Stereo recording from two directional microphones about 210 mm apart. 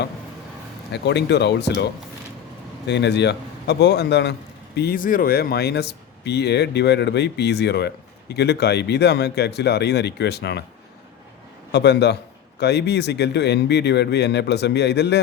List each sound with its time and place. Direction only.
0.9 s a man's voice: 55° left (ahead or behind)
11.7 s a man's voice: 55° left (ahead or behind)